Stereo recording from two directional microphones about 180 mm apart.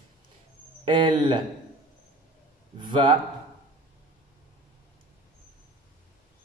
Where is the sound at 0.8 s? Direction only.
25° right (ahead or behind).